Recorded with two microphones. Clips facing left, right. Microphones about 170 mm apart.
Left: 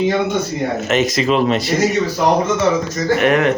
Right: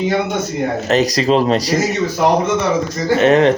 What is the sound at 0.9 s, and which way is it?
Speech, 35° right (ahead or behind).